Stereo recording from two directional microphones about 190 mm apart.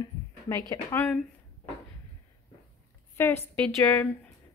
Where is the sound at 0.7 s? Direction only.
20° left (ahead or behind).